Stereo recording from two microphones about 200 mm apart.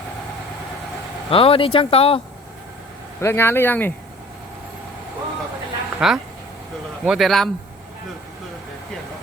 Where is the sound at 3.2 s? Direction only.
10° left (ahead or behind).